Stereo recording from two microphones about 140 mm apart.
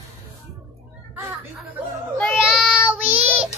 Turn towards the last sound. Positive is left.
turn(degrees=-10)  # may be behind; listen again after turning